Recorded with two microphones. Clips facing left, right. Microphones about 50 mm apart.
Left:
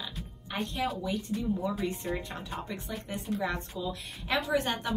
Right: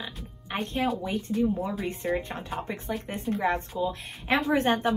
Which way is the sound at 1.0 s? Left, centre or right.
Right.